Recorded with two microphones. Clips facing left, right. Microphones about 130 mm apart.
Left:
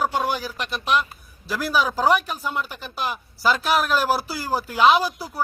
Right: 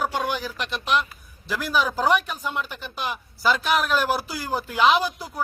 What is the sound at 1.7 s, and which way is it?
Speech, 35° left (ahead or behind).